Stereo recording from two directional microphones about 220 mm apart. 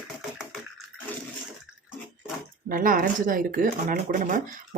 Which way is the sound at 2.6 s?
40° right (ahead or behind).